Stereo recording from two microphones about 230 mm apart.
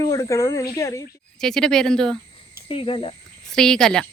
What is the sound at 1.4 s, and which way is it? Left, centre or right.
Speech, centre.